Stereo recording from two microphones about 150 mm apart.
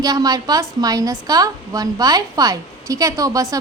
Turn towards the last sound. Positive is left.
turn(degrees=-25)  # may be behind; listen again after turning